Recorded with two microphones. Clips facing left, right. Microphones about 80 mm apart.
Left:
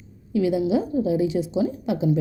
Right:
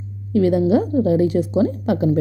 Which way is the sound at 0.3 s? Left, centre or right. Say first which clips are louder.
Right 5 dB; right.